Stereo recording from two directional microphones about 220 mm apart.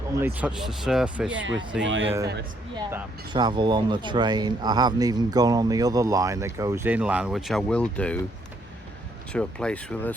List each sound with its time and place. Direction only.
0.2 s speech: 10° right (ahead or behind)
1.8 s speech: 60° right (ahead or behind)
2.7 s speech: 20° right (ahead or behind); by 8.2 s 5° left (ahead or behind)
9.3 s speech: 5° left (ahead or behind)